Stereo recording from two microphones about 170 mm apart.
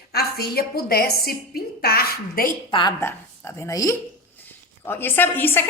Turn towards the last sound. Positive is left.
turn(degrees=10)  # may be behind; listen again after turning